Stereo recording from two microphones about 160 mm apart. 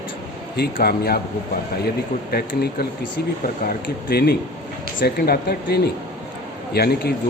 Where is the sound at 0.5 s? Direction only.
75° left (ahead or behind).